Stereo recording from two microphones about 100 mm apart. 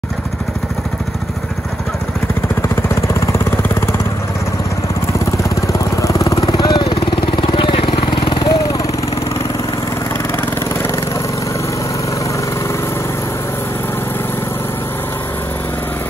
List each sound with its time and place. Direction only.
2.7 s vehicle: 25° left (ahead or behind)
6.0 s vehicle: 35° left (ahead or behind)
6.4 s vehicle: 50° left (ahead or behind)